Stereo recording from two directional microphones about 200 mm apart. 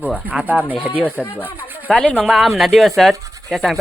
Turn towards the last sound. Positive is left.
turn(degrees=0)  # may be behind; listen again after turning